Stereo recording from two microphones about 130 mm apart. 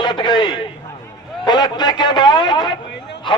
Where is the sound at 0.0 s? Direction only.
35° left (ahead or behind).